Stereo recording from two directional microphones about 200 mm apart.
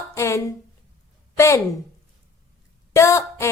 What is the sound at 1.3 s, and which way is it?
Speech, 15° left (ahead or behind).